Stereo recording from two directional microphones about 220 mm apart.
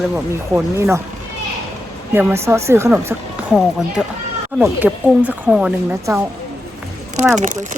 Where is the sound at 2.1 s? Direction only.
10° right (ahead or behind).